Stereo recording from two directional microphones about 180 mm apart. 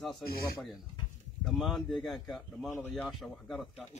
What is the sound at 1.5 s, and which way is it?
Speech, centre (ahead or behind).